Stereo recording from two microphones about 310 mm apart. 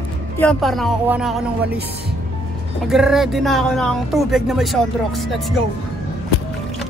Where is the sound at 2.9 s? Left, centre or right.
Centre.